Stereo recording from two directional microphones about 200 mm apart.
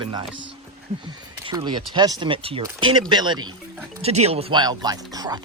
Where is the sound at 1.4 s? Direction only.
25° right (ahead or behind).